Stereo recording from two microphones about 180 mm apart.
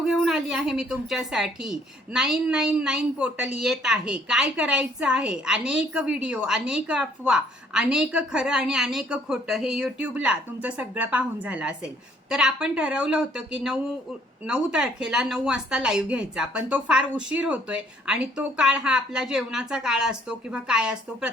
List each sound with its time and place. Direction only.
0.0 s a woman's voice: centre (ahead or behind)